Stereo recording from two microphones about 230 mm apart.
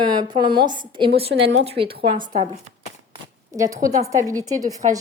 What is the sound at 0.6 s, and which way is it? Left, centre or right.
A woman's voice, centre.